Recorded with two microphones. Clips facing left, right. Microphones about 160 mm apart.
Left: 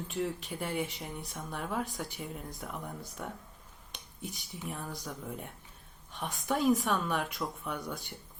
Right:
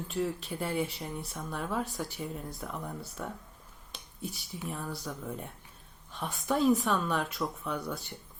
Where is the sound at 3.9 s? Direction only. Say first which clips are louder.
Right 3 dB; 20° left (ahead or behind).